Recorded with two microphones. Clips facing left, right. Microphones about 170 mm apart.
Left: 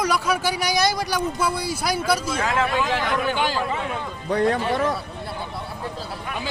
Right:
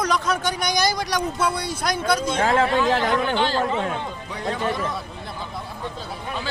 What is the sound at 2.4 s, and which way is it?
Speech, 30° right (ahead or behind).